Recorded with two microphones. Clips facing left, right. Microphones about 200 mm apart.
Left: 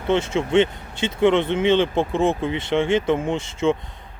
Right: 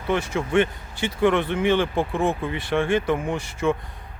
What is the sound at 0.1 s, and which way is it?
Speech, 25° left (ahead or behind).